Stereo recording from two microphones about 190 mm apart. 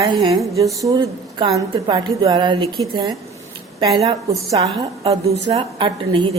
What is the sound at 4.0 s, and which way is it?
A woman's voice, 30° right (ahead or behind).